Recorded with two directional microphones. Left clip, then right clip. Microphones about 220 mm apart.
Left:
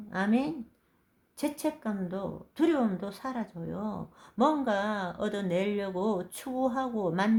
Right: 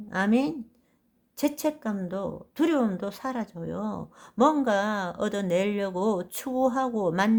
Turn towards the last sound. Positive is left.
turn(degrees=-35)  # may be behind; listen again after turning